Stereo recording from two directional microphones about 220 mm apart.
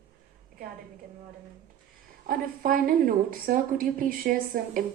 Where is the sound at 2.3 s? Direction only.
40° right (ahead or behind).